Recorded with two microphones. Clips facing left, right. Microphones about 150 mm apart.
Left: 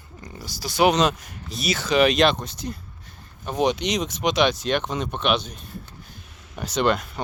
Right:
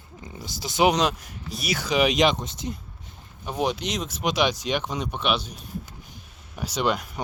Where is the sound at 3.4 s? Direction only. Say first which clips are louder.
Left 4 dB; 5° right (ahead or behind).